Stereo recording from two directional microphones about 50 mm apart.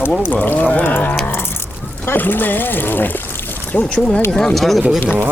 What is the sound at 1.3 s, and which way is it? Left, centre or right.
Dog, left.